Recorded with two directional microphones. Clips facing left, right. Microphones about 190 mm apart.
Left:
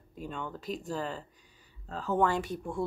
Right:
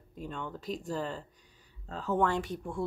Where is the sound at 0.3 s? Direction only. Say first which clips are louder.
Even; 5° left (ahead or behind).